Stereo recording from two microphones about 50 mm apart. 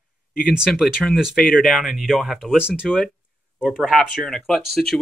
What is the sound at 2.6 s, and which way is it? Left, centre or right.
Speech, right.